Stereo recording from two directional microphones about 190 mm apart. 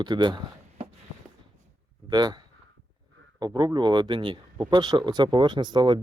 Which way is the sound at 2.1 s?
20° right (ahead or behind).